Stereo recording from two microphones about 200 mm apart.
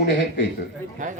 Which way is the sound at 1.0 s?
40° right (ahead or behind).